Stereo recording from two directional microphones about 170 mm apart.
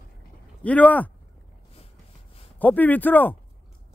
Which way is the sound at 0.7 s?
10° left (ahead or behind).